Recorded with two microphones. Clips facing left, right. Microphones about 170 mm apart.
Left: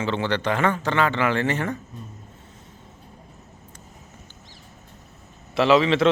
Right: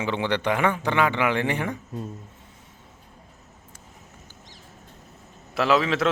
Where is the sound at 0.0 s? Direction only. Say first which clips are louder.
Left 1 dB; 15° right (ahead or behind).